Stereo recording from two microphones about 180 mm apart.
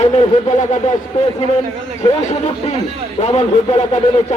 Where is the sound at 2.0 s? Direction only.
40° left (ahead or behind).